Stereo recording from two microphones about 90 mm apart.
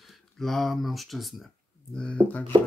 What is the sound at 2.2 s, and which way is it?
Chopping, 15° left (ahead or behind).